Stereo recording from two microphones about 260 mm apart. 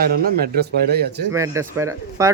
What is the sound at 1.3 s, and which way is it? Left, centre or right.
Speech, centre.